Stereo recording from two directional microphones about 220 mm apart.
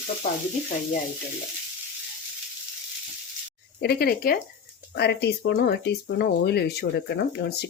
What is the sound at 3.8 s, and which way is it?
Speech, 45° left (ahead or behind).